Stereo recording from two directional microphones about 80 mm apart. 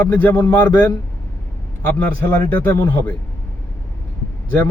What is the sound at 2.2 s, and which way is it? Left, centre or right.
Speech, left.